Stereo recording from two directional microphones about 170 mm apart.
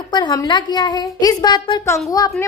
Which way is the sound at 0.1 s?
25° left (ahead or behind).